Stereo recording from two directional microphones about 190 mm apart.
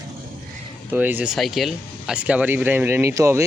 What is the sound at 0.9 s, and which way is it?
Speech, 10° right (ahead or behind).